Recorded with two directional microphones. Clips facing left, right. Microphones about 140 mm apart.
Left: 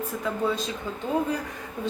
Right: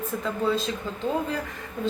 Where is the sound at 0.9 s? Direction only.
15° left (ahead or behind).